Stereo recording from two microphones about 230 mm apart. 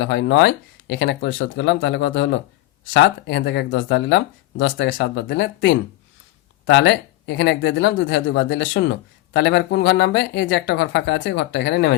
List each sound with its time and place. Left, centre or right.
0.0 s speech: left